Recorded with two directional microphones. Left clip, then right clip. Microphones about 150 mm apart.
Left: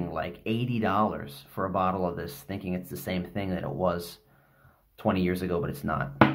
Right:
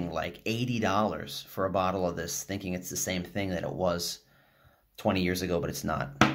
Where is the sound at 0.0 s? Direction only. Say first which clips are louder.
Even; 20° right (ahead or behind).